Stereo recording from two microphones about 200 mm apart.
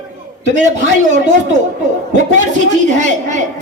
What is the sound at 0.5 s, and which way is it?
Speech, 35° right (ahead or behind).